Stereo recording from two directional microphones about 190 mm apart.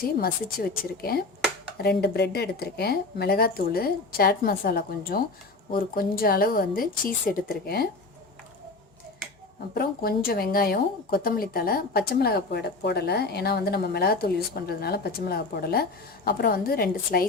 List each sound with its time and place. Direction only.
0.0 s speech: 50° left (ahead or behind)
1.8 s speech: 60° left (ahead or behind)
9.7 s speech: 55° left (ahead or behind)